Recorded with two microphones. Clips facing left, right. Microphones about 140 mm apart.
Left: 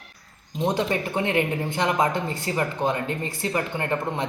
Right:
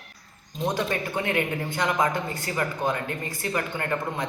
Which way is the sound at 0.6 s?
20° left (ahead or behind).